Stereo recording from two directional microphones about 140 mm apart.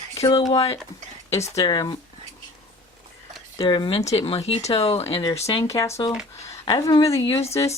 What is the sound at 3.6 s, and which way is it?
Speech, 35° left (ahead or behind).